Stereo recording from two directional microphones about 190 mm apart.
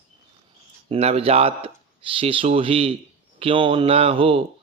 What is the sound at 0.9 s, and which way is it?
A man's voice, 30° right (ahead or behind).